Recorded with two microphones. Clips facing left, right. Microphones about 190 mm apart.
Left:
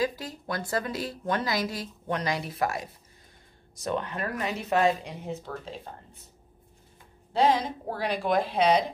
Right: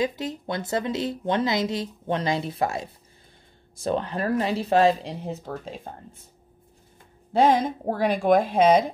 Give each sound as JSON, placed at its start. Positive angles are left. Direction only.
{"t": 0.0, "sound": "a woman's voice", "side_deg": -20}
{"t": 7.3, "sound": "speech", "side_deg": -50}